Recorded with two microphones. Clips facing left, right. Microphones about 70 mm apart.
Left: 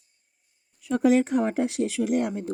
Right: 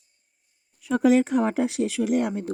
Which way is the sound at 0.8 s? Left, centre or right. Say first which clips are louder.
Right 1 dB; right.